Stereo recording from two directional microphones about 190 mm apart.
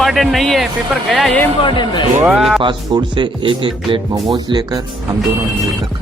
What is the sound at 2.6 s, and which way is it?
Speech, 25° right (ahead or behind).